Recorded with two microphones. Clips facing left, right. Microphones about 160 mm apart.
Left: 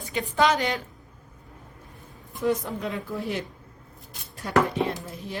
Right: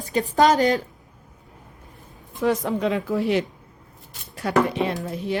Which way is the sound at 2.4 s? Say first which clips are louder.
Right 4 dB; 90° right.